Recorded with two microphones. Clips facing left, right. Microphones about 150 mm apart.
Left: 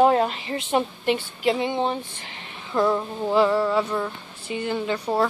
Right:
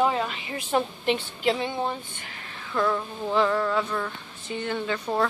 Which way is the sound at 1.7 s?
25° left (ahead or behind).